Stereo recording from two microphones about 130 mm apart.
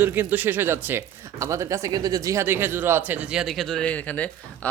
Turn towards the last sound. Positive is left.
turn(degrees=10)  # may be behind; listen again after turning